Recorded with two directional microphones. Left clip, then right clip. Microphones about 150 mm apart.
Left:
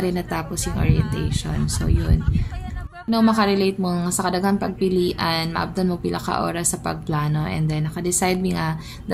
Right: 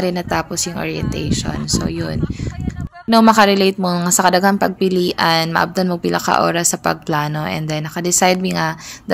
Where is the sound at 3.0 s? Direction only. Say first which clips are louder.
Right 9 dB; 55° right (ahead or behind).